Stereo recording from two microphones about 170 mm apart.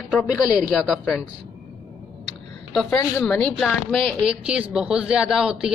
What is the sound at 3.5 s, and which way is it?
A woman's voice, centre (ahead or behind).